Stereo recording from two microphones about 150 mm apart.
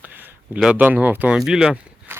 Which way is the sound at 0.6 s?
10° right (ahead or behind).